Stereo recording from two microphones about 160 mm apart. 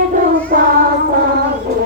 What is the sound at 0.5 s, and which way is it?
Child singing, 60° right (ahead or behind).